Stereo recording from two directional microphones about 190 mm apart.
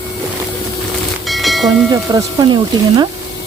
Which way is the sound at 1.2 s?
Centre (ahead or behind).